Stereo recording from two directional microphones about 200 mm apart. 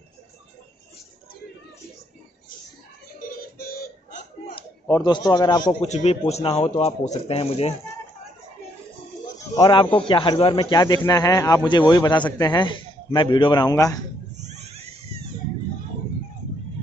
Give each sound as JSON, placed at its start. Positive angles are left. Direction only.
{"t": 3.2, "sound": "music", "side_deg": 45}
{"t": 4.5, "sound": "a man's voice", "side_deg": 25}
{"t": 5.7, "sound": "a man's voice", "side_deg": 35}
{"t": 9.6, "sound": "speech", "side_deg": 25}